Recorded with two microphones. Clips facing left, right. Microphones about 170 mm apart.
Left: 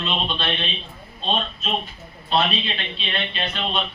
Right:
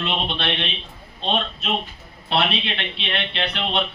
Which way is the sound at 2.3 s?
70° right (ahead or behind).